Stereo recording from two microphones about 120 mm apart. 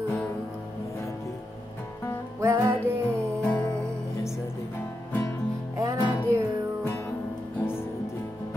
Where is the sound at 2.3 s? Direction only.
15° right (ahead or behind).